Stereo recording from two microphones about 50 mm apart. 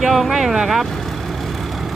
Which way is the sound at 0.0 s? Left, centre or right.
Centre.